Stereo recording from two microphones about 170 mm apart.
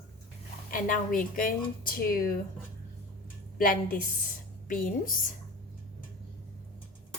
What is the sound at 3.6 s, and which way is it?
Speech, 55° left (ahead or behind).